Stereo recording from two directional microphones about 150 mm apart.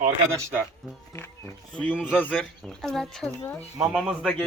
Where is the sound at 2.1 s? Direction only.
10° left (ahead or behind).